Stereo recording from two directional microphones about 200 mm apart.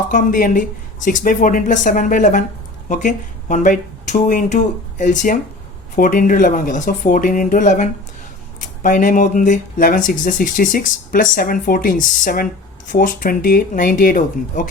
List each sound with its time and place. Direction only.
0.1 s speech: 40° left (ahead or behind)